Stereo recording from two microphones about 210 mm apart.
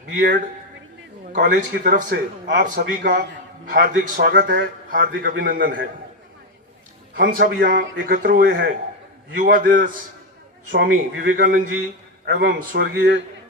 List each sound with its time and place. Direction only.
0.1 s a man's voice: 40° right (ahead or behind)
7.3 s a man's voice: 45° right (ahead or behind)
12.2 s a man's voice: 55° right (ahead or behind)